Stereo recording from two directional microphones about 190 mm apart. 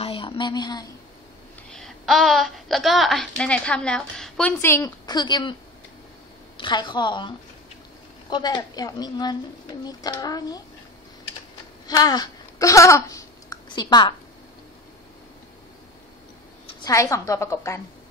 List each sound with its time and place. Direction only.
0.0 s a sound: 25° left (ahead or behind)
1.7 s a woman's voice: centre (ahead or behind); by 5.6 s 25° left (ahead or behind)
6.6 s a woman's voice: 25° left (ahead or behind)
11.9 s speech: 20° left (ahead or behind)
16.8 s a woman's voice: 15° left (ahead or behind)